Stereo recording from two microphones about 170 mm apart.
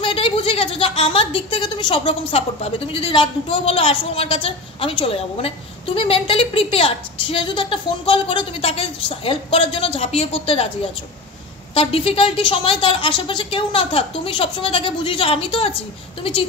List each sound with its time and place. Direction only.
0.0 s a woman's voice: 30° left (ahead or behind)
11.7 s a woman's voice: 35° left (ahead or behind)